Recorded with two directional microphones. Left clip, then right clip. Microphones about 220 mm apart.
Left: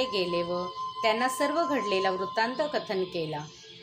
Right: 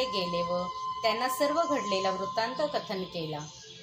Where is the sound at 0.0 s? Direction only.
35° left (ahead or behind).